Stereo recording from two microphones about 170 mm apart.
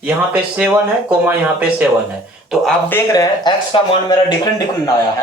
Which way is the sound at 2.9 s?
15° left (ahead or behind).